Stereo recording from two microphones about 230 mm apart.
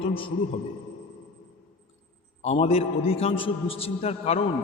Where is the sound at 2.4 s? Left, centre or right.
Left.